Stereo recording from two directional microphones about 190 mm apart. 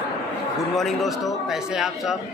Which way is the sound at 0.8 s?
Centre (ahead or behind).